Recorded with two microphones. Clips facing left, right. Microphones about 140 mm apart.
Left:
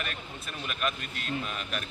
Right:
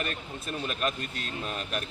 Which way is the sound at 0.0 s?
35° right (ahead or behind).